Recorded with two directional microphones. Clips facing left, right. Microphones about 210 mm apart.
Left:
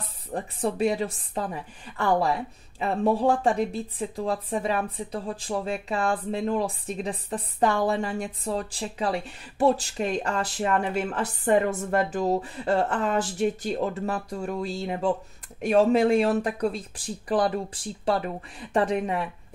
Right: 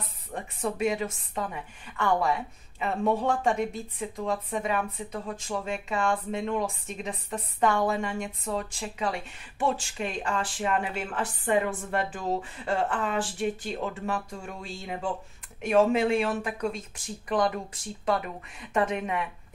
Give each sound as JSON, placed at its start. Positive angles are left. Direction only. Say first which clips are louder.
{"t": 0.0, "sound": "a woman's voice", "louder": "left 5 dB", "side_deg": 35}